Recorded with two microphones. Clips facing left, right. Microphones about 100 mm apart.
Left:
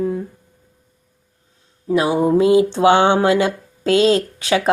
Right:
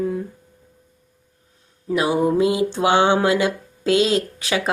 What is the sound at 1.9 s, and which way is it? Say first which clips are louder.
Speech: left 3 dB; 30° left (ahead or behind).